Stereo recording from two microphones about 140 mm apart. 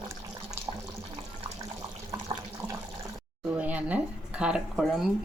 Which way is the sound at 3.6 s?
10° right (ahead or behind).